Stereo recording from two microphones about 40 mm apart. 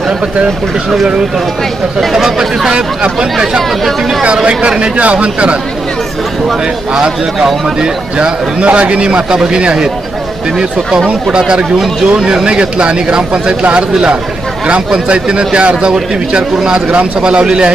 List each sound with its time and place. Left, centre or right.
2.0 s speech: centre
2.6 s speech: right
7.0 s speech: centre
8.6 s speech: right
15.0 s speech: right